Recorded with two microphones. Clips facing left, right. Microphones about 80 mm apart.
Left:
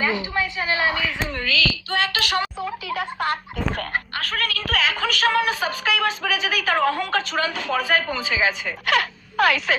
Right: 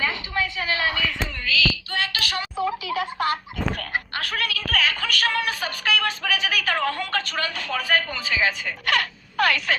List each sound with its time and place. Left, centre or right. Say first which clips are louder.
0.0 s a sound: left 3 dB; centre
1.9 s child singing: left 4 dB; left
2.9 s speech: left 3 dB; centre
4.1 s a woman's voice: left 1 dB; centre
4.7 s speech: left 2 dB; centre